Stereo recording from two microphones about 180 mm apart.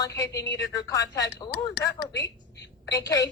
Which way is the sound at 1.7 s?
65° left (ahead or behind).